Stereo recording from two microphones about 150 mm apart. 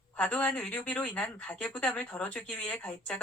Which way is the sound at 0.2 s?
5° left (ahead or behind).